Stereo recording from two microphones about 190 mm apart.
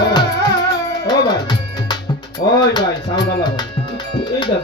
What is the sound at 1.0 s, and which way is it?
Music, 20° left (ahead or behind).